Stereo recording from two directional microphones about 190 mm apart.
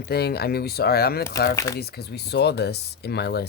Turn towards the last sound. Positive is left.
turn(degrees=60)  # may be behind; listen again after turning